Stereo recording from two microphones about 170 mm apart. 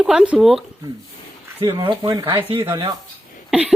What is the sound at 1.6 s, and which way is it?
Speech, 25° right (ahead or behind).